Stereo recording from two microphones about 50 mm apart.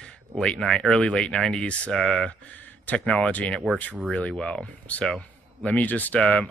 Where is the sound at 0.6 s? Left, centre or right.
Centre; by 6.2 s left.